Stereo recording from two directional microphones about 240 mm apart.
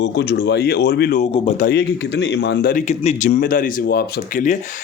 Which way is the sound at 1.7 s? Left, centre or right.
Left.